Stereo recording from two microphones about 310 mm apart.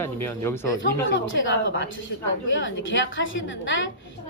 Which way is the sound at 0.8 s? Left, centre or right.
Left.